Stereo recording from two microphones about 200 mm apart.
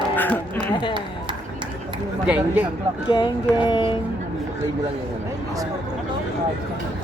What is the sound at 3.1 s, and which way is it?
Music, 20° left (ahead or behind).